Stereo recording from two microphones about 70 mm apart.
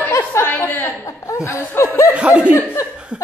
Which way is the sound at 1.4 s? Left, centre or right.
Left.